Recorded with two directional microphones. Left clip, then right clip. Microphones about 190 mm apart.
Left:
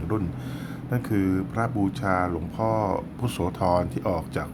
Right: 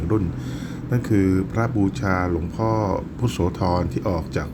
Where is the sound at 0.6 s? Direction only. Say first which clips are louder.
Right 3 dB; centre (ahead or behind).